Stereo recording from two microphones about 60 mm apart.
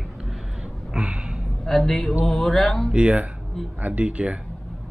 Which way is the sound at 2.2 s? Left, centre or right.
Centre.